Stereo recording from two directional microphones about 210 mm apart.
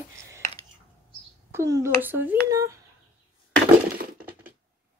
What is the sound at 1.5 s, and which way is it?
Speech, 15° right (ahead or behind).